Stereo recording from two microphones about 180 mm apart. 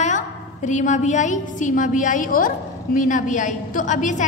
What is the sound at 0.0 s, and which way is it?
A woman's voice, 45° left (ahead or behind).